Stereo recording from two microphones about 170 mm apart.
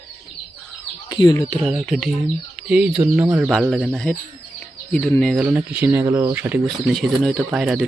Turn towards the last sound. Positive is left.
turn(degrees=-5)  # may be behind; listen again after turning